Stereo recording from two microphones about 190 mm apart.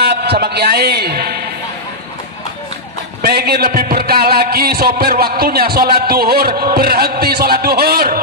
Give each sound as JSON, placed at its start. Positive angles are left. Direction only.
{"t": 0.0, "sound": "a man's voice", "side_deg": -60}
{"t": 3.2, "sound": "a man's voice", "side_deg": -55}